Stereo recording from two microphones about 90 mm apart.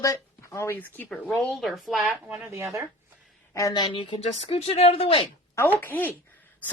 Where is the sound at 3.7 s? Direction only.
65° left (ahead or behind); by 5.3 s 90° left.